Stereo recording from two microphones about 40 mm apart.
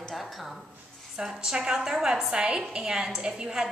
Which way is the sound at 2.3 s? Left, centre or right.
Right.